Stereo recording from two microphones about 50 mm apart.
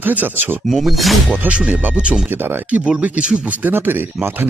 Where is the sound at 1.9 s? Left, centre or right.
Right.